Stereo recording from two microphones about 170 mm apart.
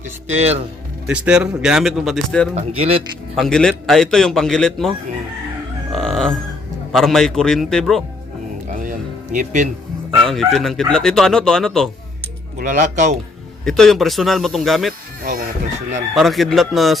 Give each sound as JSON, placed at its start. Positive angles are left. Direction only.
{"t": 0.3, "sound": "speech", "side_deg": -40}
{"t": 1.0, "sound": "speech", "side_deg": -10}
{"t": 2.6, "sound": "speech", "side_deg": -35}
{"t": 3.4, "sound": "speech", "side_deg": 5}
{"t": 5.9, "sound": "chicken", "side_deg": 0}
{"t": 6.9, "sound": "speech", "side_deg": 0}
{"t": 8.6, "sound": "music", "side_deg": -50}
{"t": 10.2, "sound": "speech", "side_deg": 0}
{"t": 12.5, "sound": "speech", "side_deg": -50}
{"t": 13.7, "sound": "speech", "side_deg": 0}
{"t": 15.2, "sound": "speech", "side_deg": -60}
{"t": 16.1, "sound": "speech", "side_deg": 0}